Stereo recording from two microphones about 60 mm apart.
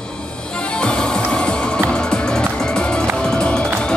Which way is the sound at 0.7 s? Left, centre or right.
Centre.